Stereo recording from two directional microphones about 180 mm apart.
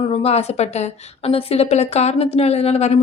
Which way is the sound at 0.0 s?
35° left (ahead or behind).